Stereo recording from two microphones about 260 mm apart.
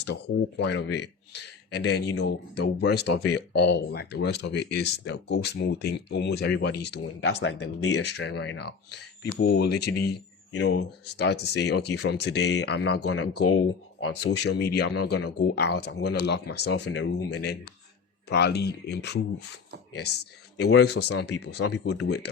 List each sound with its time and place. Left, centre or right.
0.6 s speech: left
20.6 s speech: left